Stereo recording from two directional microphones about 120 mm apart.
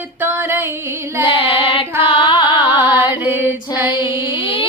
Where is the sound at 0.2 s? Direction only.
15° right (ahead or behind).